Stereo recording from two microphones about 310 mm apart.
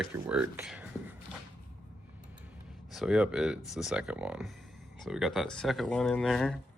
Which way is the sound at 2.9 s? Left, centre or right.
Centre.